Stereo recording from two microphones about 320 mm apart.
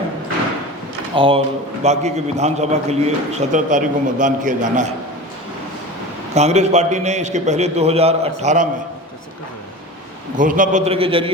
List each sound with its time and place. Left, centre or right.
1.1 s a man's voice: centre
6.3 s a man's voice: right
10.3 s a man's voice: right